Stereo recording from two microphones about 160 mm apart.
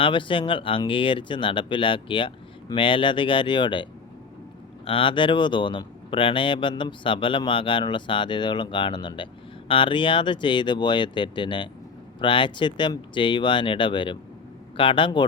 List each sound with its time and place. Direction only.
0.0 s speech: 30° left (ahead or behind)
4.9 s speech: 35° left (ahead or behind)